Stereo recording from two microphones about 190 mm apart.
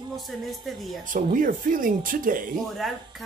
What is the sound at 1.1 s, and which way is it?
Speech, 45° right (ahead or behind).